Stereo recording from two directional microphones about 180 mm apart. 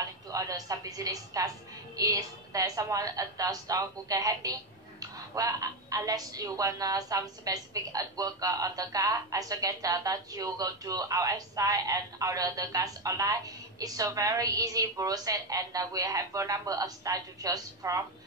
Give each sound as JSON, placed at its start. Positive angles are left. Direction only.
{"t": 0.3, "sound": "a woman's voice", "side_deg": -20}